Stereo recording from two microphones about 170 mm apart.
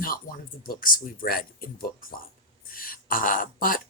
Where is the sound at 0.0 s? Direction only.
55° left (ahead or behind).